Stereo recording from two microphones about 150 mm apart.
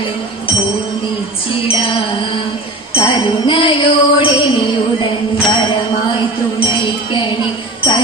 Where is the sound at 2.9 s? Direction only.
35° left (ahead or behind).